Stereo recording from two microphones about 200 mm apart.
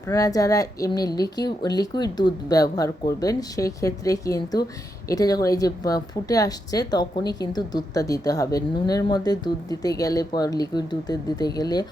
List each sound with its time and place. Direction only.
0.1 s a woman's voice: 15° left (ahead or behind)